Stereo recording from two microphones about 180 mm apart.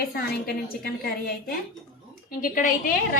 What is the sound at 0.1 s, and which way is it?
A woman's voice, 60° left (ahead or behind).